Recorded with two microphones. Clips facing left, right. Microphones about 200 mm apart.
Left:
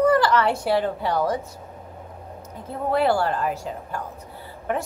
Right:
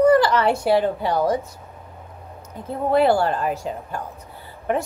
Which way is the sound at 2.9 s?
20° right (ahead or behind).